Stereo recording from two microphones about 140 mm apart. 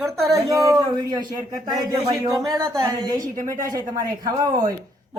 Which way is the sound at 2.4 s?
25° right (ahead or behind).